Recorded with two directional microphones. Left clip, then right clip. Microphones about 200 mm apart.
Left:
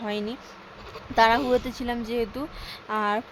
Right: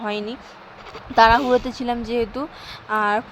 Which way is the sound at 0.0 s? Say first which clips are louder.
Right 4 dB; 10° right (ahead or behind).